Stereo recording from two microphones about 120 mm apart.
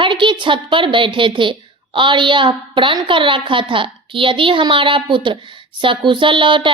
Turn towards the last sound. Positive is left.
turn(degrees=-45)  # may be behind; listen again after turning